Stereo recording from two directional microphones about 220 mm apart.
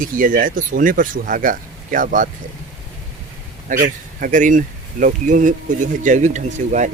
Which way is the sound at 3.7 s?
35° right (ahead or behind).